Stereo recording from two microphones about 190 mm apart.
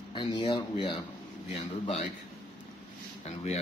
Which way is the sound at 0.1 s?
25° left (ahead or behind).